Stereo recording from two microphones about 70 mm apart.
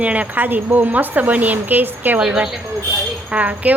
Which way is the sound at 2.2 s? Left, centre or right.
Centre.